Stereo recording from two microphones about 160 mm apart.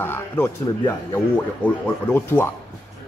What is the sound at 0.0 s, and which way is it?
A man's voice, 15° left (ahead or behind).